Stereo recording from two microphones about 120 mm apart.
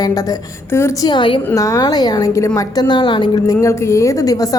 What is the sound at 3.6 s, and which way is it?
Speech, 25° left (ahead or behind).